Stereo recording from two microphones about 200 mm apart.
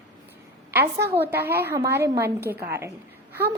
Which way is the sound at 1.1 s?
10° right (ahead or behind).